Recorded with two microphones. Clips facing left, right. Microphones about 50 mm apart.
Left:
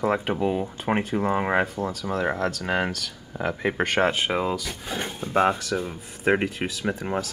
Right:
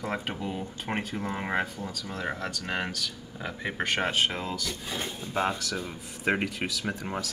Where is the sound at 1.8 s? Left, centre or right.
Left.